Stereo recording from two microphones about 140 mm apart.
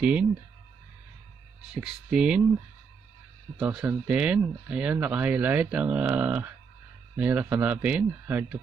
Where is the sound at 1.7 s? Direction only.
5° right (ahead or behind).